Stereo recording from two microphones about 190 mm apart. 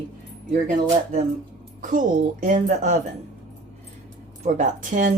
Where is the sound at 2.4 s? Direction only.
45° right (ahead or behind).